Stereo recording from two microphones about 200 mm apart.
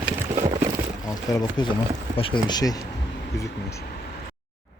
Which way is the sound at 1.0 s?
20° left (ahead or behind).